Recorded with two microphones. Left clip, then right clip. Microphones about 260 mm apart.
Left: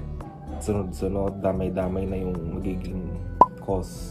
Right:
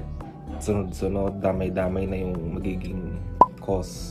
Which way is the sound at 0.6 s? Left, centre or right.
Centre.